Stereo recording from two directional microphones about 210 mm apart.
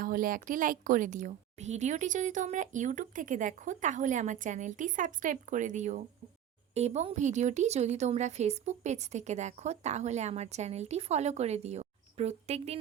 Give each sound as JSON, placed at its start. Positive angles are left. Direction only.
{"t": 0.0, "sound": "a woman's voice", "side_deg": -40}